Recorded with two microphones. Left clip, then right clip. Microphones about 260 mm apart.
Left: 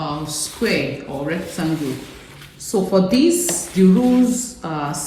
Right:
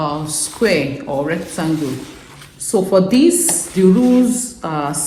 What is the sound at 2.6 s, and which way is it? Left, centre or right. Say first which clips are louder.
A woman's voice: right 4 dB; right.